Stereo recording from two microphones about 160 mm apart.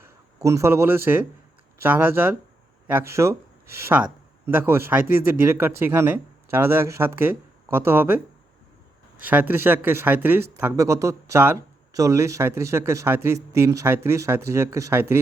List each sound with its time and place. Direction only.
0.0 s speech: 15° right (ahead or behind)
9.2 s speech: 10° right (ahead or behind)